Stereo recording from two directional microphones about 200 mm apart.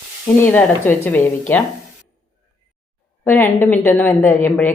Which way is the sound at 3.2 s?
10° left (ahead or behind).